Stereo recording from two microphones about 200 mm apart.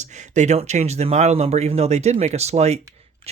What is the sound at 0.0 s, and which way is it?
Speech, 35° right (ahead or behind).